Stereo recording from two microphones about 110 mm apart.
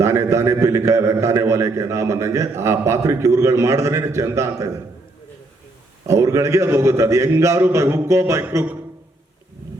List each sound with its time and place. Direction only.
0.0 s a man's voice: 25° right (ahead or behind)
6.1 s a man's voice: 25° right (ahead or behind)